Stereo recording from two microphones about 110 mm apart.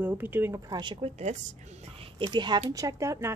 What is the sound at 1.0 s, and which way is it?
Speech, 90° right.